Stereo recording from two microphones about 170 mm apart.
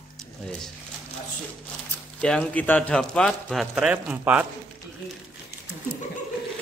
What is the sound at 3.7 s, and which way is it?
Speech, 5° right (ahead or behind).